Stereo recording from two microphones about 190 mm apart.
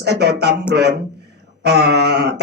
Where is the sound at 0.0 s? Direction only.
60° right (ahead or behind).